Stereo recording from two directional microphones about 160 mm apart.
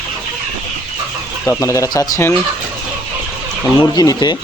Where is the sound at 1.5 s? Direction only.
20° left (ahead or behind).